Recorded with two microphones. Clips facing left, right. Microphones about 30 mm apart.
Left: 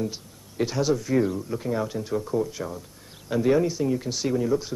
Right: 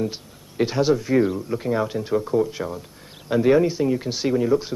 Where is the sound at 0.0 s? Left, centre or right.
Right.